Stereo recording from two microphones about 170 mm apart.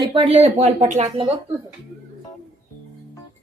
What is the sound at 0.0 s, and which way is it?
Speech, 30° right (ahead or behind).